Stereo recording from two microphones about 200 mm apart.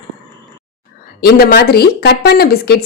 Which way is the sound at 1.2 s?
50° left (ahead or behind).